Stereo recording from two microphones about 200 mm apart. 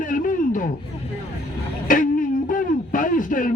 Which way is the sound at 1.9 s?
40° left (ahead or behind).